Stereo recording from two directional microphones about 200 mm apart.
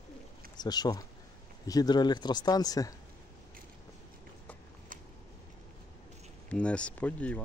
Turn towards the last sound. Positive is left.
turn(degrees=5)  # may be behind; listen again after turning